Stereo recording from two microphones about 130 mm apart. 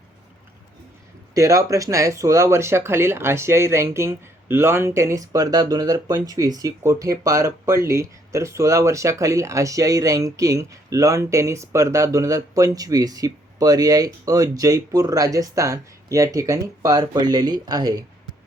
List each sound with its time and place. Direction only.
1.3 s speech: 25° right (ahead or behind)